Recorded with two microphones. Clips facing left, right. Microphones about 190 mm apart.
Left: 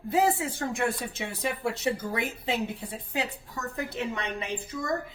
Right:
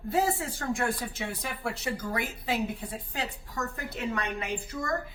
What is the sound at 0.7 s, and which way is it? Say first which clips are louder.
A woman's voice: right 3 dB; 25° left (ahead or behind).